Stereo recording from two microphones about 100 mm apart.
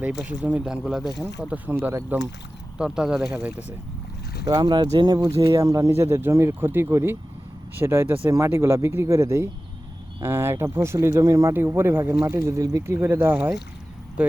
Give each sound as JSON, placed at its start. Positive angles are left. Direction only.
{"t": 0.3, "sound": "speech", "side_deg": -15}
{"t": 1.4, "sound": "speech", "side_deg": -15}
{"t": 2.7, "sound": "speech", "side_deg": -5}
{"t": 4.4, "sound": "speech", "side_deg": -45}
{"t": 12.2, "sound": "speech", "side_deg": -35}